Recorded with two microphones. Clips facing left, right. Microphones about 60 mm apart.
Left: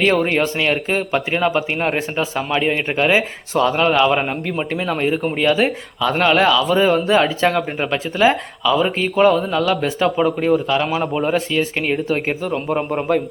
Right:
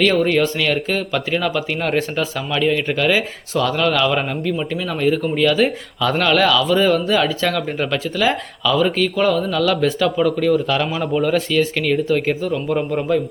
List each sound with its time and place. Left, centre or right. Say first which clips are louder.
0.0 s speech: right 1 dB; left
4.5 s speech: left 2 dB; left
5.6 s speech: even; centre